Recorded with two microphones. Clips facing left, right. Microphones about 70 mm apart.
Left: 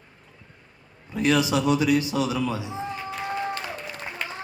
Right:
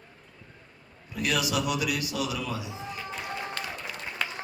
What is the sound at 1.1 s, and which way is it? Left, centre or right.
A man's voice, left.